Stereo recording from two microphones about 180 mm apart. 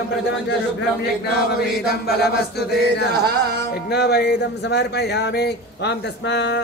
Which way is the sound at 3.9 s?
65° left (ahead or behind).